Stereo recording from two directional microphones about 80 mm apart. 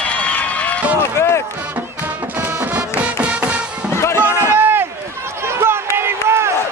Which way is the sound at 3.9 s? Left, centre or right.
Left.